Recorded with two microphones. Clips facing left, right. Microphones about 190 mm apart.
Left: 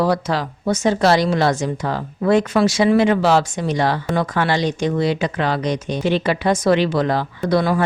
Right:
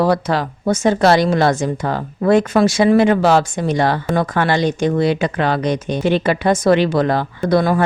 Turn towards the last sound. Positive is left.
turn(degrees=-50)  # may be behind; listen again after turning